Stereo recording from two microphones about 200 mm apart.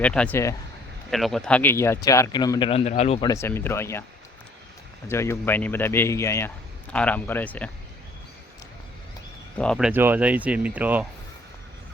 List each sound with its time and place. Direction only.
0.0 s speech: 5° left (ahead or behind); by 3.2 s 35° left (ahead or behind)
3.2 s speech: 15° left (ahead or behind)
5.0 s speech: 15° left (ahead or behind)
9.6 s speech: centre (ahead or behind)